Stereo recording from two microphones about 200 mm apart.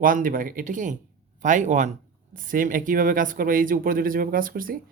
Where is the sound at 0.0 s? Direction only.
45° right (ahead or behind).